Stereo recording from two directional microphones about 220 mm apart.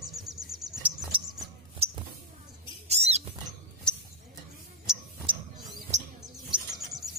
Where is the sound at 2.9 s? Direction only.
30° right (ahead or behind).